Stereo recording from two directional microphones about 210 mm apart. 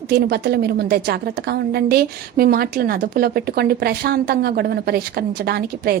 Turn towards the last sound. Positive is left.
turn(degrees=-50)  # may be behind; listen again after turning